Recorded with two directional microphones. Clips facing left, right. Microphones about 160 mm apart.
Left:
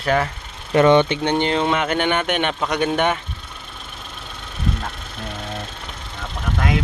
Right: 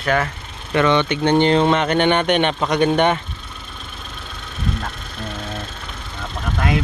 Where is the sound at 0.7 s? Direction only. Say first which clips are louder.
Left 3 dB; 40° left (ahead or behind).